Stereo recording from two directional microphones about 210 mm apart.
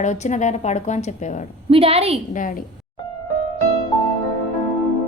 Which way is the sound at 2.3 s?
40° left (ahead or behind).